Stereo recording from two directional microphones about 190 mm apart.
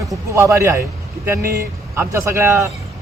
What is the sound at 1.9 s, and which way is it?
Speech, 15° right (ahead or behind).